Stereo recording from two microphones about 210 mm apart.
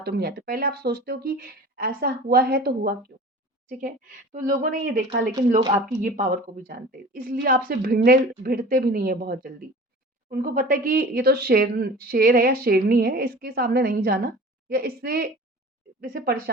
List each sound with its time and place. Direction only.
0.0 s speech: 50° right (ahead or behind)
3.1 s a sound: 50° right (ahead or behind)
3.7 s a woman's voice: 40° right (ahead or behind)